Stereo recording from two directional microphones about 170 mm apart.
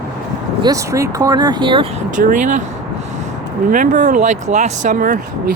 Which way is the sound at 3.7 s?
50° right (ahead or behind).